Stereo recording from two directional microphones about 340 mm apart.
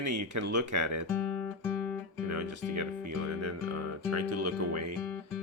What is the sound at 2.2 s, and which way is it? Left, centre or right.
Speech, right.